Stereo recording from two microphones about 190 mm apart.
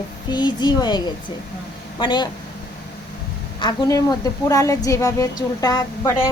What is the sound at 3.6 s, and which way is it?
A woman's voice, 20° left (ahead or behind).